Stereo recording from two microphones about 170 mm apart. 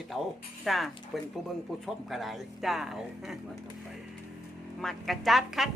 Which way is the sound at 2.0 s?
Centre (ahead or behind).